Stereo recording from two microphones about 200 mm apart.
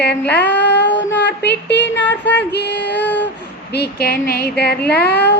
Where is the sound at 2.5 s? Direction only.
55° left (ahead or behind).